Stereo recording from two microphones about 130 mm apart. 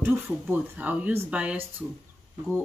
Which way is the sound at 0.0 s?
15° right (ahead or behind).